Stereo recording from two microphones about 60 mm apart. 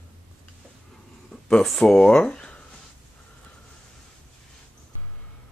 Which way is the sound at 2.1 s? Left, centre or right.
Centre.